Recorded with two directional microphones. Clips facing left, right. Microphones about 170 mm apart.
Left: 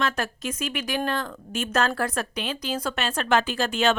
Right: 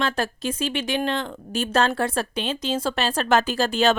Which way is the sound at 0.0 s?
30° right (ahead or behind).